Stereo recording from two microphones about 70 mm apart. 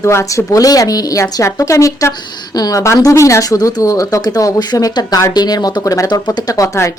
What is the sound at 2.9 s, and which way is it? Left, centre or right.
Speech, left.